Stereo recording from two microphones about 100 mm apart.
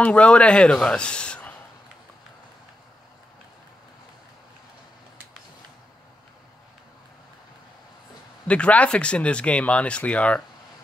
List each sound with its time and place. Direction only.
0.0 s a man's voice: 10° left (ahead or behind)
8.5 s speech: 10° left (ahead or behind)